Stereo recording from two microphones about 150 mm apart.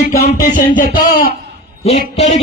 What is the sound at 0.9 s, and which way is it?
Speech, 75° left (ahead or behind).